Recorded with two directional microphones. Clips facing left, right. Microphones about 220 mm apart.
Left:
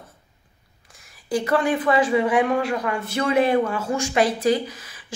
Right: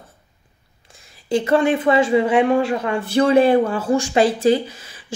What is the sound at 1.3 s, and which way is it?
A woman's voice, 25° right (ahead or behind).